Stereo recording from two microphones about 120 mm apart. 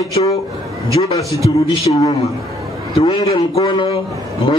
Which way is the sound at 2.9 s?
45° left (ahead or behind).